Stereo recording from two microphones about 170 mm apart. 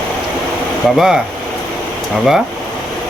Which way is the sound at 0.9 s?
5° right (ahead or behind).